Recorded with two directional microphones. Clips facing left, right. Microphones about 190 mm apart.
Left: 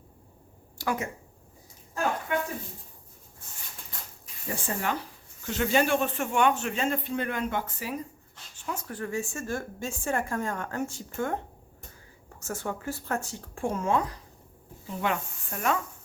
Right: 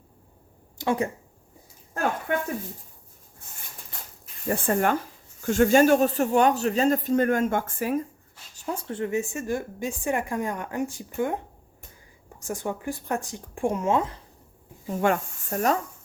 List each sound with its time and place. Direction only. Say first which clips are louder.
0.8 s speech: right 5 dB; 30° right (ahead or behind)
4.4 s speech: right 8 dB; 55° right (ahead or behind)
8.5 s speech: right 5 dB; 35° right (ahead or behind); by 11.3 s 15° right (ahead or behind)
12.4 s speech: right 3 dB; 15° right (ahead or behind)
14.8 s speech: right 6 dB; 45° right (ahead or behind)